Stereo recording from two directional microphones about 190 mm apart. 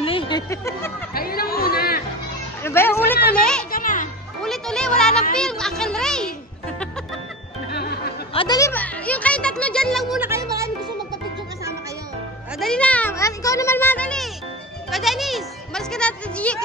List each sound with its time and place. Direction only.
0.0 s a sound: 30° left (ahead or behind)
0.5 s speech: 15° left (ahead or behind)
1.1 s chatter: 50° left (ahead or behind)
2.6 s speech: 10° left (ahead or behind)
3.7 s a child's voice: 45° left (ahead or behind)
4.4 s music: 5° left (ahead or behind)
5.3 s a sound: 5° left (ahead or behind)
7.7 s music: 55° left (ahead or behind)
8.3 s speech: 30° left (ahead or behind)
8.5 s speech: 10° left (ahead or behind)
10.3 s music: 15° right (ahead or behind)
12.5 s speech: 5° left (ahead or behind)